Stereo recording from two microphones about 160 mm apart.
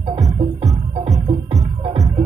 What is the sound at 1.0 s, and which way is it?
Music, 45° right (ahead or behind).